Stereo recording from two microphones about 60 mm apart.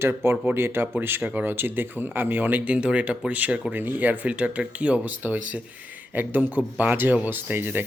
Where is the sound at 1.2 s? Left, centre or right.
Right.